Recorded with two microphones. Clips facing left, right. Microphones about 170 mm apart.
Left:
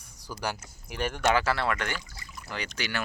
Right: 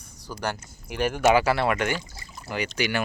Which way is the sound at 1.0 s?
5° right (ahead or behind).